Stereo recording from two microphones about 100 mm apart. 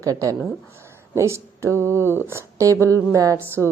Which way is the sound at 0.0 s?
35° right (ahead or behind).